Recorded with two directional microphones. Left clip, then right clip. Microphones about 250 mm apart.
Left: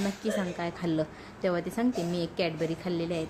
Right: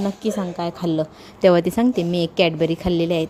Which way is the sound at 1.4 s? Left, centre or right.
Right.